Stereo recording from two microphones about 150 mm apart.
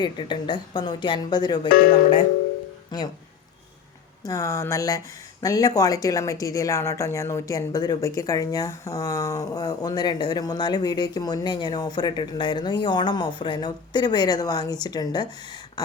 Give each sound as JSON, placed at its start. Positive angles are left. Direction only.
{"t": 0.0, "sound": "speech", "side_deg": 30}
{"t": 2.9, "sound": "speech", "side_deg": 30}
{"t": 4.2, "sound": "speech", "side_deg": 20}